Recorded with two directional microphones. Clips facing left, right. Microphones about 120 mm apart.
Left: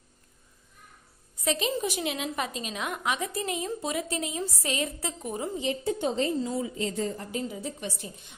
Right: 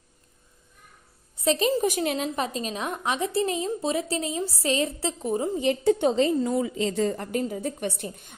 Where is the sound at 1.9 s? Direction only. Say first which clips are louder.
Right 5 dB; 45° right (ahead or behind).